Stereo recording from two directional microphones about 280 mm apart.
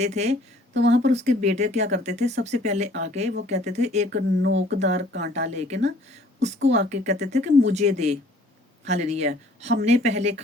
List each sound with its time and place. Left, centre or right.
0.0 s speech: right
0.7 s speech: right
1.0 s speech: right
4.1 s speech: right
5.3 s speech: right
6.6 s speech: right
6.9 s speech: right